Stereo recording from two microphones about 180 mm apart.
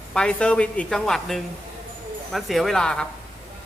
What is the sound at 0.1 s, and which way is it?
A man's voice, 5° left (ahead or behind).